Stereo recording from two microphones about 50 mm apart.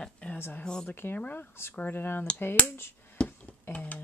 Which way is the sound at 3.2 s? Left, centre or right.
Left.